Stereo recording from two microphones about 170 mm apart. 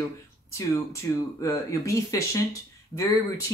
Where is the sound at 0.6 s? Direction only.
20° left (ahead or behind).